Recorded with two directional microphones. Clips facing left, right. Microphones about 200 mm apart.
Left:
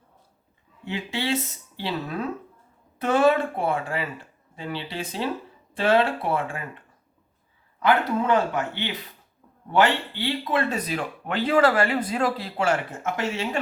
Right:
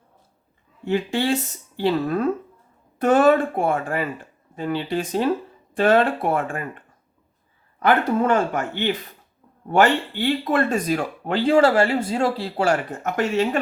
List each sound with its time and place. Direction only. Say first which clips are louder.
0.9 s speech: right 6 dB; 45° right (ahead or behind)
13.1 s speech: right 6 dB; 50° right (ahead or behind)